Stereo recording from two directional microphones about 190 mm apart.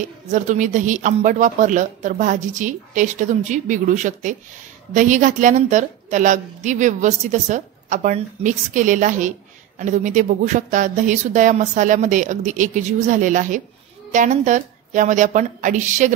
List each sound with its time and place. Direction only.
0.3 s a woman's voice: 40° right (ahead or behind)